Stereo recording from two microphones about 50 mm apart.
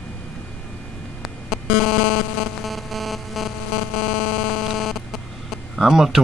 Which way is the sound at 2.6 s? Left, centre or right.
Centre.